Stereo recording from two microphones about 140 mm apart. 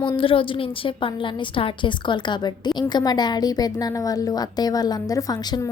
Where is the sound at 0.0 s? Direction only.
35° left (ahead or behind).